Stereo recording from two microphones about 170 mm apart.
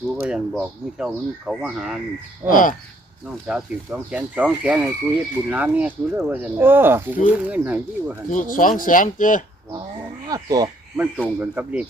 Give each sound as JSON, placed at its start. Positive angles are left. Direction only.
{"t": 0.2, "sound": "speech", "side_deg": -5}
{"t": 2.5, "sound": "speech", "side_deg": 50}
{"t": 3.4, "sound": "speech", "side_deg": -10}
{"t": 8.3, "sound": "speech", "side_deg": 50}
{"t": 10.2, "sound": "speech", "side_deg": -20}
{"t": 10.9, "sound": "speech", "side_deg": -10}